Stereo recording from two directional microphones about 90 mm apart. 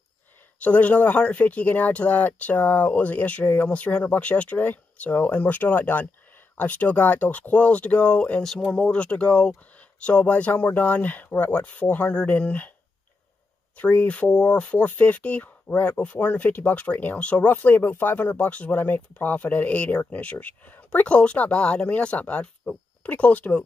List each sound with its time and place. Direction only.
0.6 s speech: 15° left (ahead or behind)
13.7 s speech: 15° left (ahead or behind)